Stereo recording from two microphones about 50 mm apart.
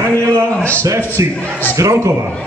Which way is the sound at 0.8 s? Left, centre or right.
Right.